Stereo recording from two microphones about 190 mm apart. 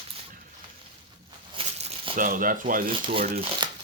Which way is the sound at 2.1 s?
45° right (ahead or behind).